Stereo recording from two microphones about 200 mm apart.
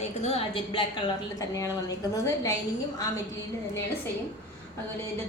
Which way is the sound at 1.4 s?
15° left (ahead or behind).